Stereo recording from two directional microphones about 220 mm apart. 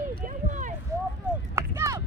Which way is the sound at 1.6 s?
15° right (ahead or behind).